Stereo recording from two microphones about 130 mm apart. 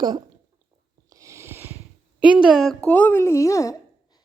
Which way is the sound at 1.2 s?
20° right (ahead or behind).